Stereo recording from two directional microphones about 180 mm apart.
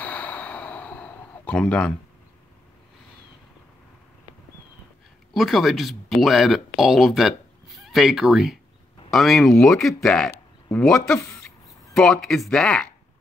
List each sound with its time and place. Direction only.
0.0 s a sound: 10° left (ahead or behind)
5.3 s speech: centre (ahead or behind)
11.1 s speech: 15° left (ahead or behind)
11.9 s speech: 5° left (ahead or behind)